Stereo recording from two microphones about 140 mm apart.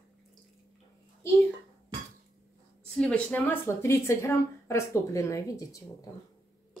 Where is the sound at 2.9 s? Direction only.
10° left (ahead or behind).